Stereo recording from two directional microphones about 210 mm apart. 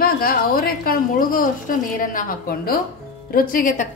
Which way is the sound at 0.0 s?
45° left (ahead or behind).